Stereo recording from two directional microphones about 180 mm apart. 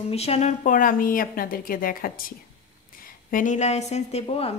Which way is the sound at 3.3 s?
45° left (ahead or behind).